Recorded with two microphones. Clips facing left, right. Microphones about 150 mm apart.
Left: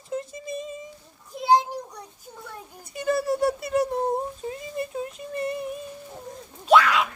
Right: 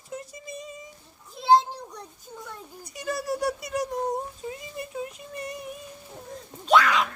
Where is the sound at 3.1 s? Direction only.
25° left (ahead or behind).